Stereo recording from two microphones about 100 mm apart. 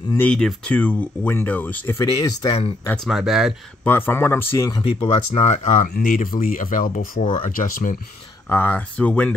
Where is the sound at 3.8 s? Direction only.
20° left (ahead or behind).